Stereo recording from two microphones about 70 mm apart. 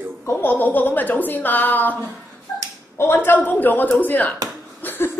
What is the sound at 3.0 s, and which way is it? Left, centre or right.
A woman's voice, left.